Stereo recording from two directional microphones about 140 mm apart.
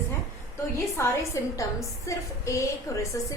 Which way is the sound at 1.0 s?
20° left (ahead or behind).